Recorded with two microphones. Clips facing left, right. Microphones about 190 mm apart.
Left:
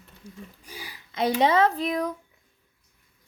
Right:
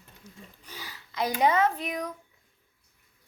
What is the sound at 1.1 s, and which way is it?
Speech, 25° left (ahead or behind).